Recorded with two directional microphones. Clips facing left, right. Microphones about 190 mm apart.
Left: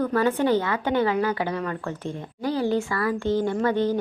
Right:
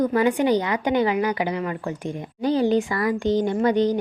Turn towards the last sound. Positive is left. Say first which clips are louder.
# right 3 dB
turn(degrees=-15)  # may be behind; listen again after turning